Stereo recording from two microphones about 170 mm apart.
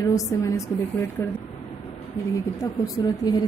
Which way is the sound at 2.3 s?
20° left (ahead or behind).